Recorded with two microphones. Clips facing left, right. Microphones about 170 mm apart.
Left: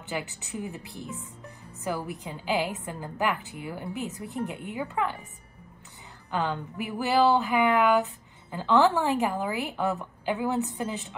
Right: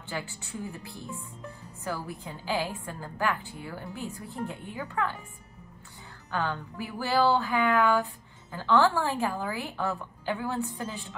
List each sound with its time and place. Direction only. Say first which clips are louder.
0.1 s speech: left 3 dB; 20° left (ahead or behind)
6.3 s speech: left 2 dB; 20° left (ahead or behind)